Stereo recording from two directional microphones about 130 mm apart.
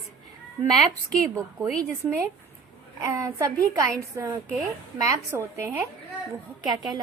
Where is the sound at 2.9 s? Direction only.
25° right (ahead or behind).